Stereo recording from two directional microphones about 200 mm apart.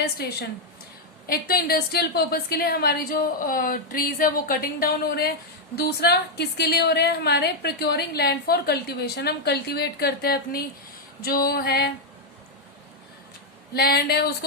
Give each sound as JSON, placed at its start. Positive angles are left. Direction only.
{"t": 0.2, "sound": "a woman's voice", "side_deg": 50}
{"t": 13.7, "sound": "a woman's voice", "side_deg": 50}